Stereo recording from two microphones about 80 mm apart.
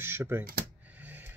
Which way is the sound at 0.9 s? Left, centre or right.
Right.